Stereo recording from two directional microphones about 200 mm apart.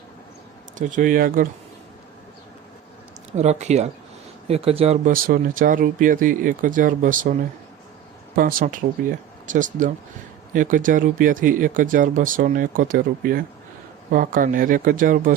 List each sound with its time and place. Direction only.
0.8 s speech: 40° right (ahead or behind)
3.3 s speech: 35° right (ahead or behind)
5.1 s speech: 45° right (ahead or behind)
8.4 s speech: 45° right (ahead or behind)